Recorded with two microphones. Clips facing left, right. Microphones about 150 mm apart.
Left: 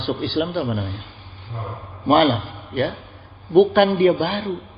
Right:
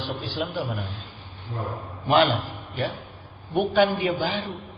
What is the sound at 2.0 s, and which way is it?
Speech, 45° left (ahead or behind).